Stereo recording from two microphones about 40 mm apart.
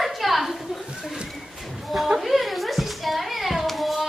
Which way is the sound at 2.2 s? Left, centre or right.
Centre.